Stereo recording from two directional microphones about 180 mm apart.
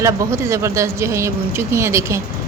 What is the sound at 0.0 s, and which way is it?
A woman's voice, 15° right (ahead or behind).